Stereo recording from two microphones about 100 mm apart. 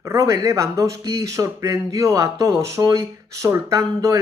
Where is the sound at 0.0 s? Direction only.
30° right (ahead or behind).